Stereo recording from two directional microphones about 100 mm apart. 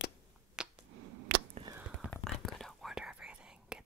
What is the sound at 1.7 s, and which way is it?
Whispering, 40° right (ahead or behind).